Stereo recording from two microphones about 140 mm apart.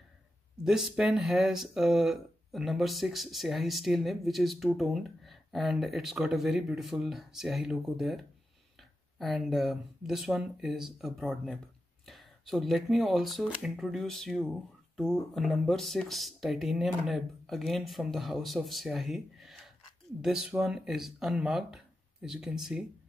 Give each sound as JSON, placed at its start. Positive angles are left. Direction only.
{"t": 0.7, "sound": "speech", "side_deg": -5}